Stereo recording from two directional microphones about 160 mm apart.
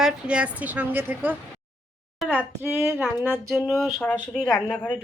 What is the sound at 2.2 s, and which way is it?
Speech, centre (ahead or behind).